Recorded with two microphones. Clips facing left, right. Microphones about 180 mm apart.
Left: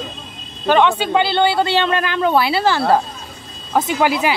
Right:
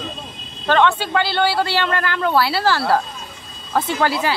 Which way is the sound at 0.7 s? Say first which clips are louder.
Left 2 dB; 15° left (ahead or behind).